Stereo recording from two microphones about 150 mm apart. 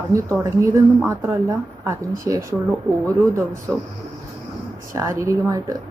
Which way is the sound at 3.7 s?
Centre (ahead or behind).